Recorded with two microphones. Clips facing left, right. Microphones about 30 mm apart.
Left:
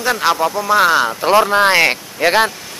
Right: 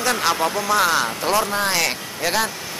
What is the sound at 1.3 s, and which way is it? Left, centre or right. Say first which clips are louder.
Speech: left 10 dB; left.